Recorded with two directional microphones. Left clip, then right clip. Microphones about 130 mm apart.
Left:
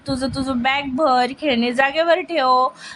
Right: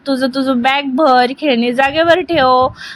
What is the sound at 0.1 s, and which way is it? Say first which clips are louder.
A woman's voice: right 8 dB; 30° right (ahead or behind).